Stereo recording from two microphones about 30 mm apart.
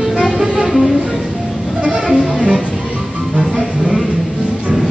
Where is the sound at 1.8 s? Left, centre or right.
Right.